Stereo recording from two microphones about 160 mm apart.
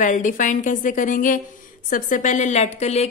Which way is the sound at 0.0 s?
50° left (ahead or behind).